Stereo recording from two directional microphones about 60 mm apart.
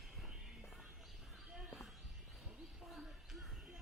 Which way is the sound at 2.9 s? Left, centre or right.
Centre.